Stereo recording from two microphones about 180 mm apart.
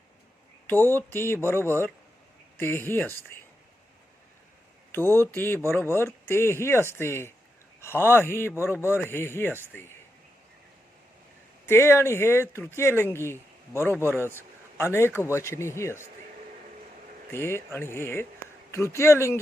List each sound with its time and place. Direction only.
0.7 s speech: 10° left (ahead or behind)
2.6 s speech: 15° left (ahead or behind)
4.9 s speech: 10° left (ahead or behind)
11.6 s speech: 15° left (ahead or behind)
13.9 s a man's voice: 10° right (ahead or behind)
14.3 s a man's voice: 15° left (ahead or behind)
17.3 s speech: 15° left (ahead or behind)